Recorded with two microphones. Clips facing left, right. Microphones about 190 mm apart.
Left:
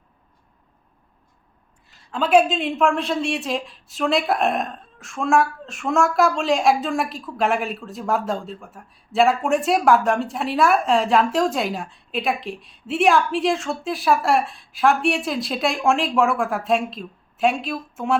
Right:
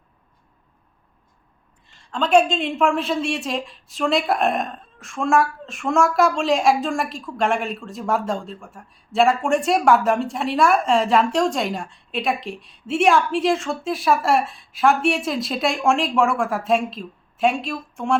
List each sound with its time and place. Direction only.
1.9 s a woman's voice: 5° left (ahead or behind)